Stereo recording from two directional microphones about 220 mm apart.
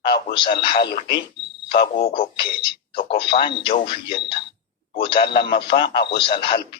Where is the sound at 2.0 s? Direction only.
25° left (ahead or behind).